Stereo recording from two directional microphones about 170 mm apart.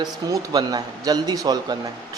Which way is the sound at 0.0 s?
20° right (ahead or behind).